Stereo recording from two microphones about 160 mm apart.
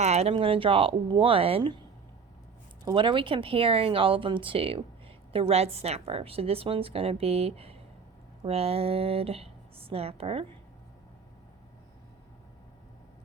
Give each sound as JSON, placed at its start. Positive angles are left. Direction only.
{"t": 0.0, "sound": "a woman's voice", "side_deg": -40}
{"t": 2.8, "sound": "a woman's voice", "side_deg": -30}